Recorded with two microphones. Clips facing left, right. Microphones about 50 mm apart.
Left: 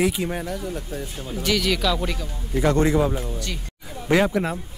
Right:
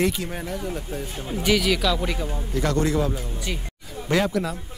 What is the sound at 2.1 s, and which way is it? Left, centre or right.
Speech, centre.